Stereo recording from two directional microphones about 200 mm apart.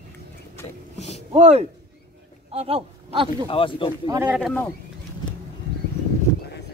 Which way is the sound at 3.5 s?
25° left (ahead or behind).